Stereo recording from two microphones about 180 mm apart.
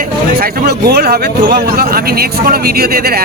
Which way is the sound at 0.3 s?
60° right (ahead or behind).